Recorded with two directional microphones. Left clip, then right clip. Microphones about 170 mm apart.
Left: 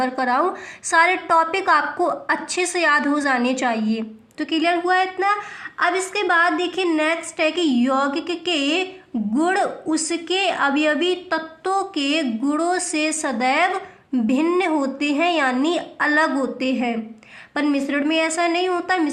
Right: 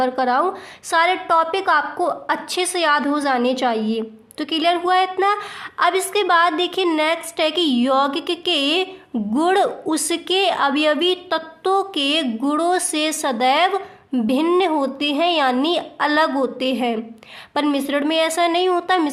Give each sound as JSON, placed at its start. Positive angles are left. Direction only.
{"t": 0.0, "sound": "a woman's voice", "side_deg": -25}